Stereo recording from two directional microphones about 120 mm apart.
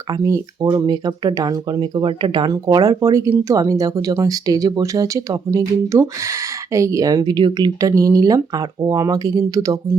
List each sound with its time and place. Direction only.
0.1 s speech: 30° right (ahead or behind)